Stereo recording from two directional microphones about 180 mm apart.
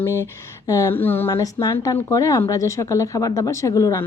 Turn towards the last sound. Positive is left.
turn(degrees=15)  # may be behind; listen again after turning